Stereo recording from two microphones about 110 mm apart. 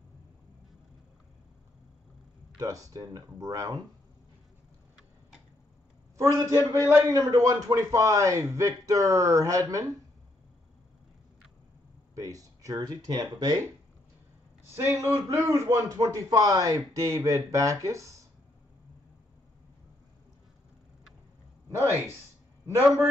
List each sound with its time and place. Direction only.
2.6 s a man's voice: 30° right (ahead or behind)
6.1 s a man's voice: 30° right (ahead or behind)
12.2 s a man's voice: 30° right (ahead or behind)
14.8 s a man's voice: 25° right (ahead or behind)